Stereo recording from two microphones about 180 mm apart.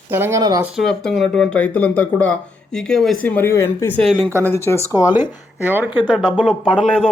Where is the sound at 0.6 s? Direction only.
Centre (ahead or behind).